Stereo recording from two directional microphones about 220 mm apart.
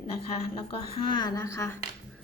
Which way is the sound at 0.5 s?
20° left (ahead or behind).